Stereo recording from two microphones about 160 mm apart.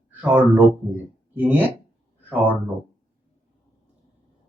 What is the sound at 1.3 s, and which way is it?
Speech, 10° right (ahead or behind).